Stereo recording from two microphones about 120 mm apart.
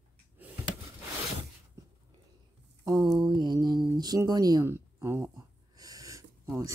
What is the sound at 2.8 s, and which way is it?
Speech, 35° right (ahead or behind).